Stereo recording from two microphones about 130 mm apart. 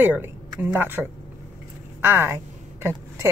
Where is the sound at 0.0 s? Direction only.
15° right (ahead or behind).